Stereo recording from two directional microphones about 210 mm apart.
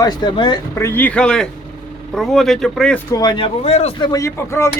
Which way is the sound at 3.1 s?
20° left (ahead or behind).